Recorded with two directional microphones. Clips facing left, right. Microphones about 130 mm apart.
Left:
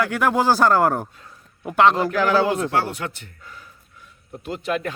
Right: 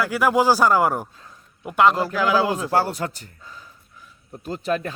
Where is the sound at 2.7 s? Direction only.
35° right (ahead or behind).